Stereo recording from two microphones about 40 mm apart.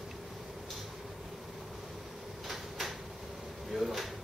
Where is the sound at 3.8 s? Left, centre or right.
Centre.